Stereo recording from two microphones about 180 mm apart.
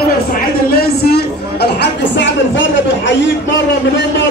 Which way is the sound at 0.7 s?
60° left (ahead or behind).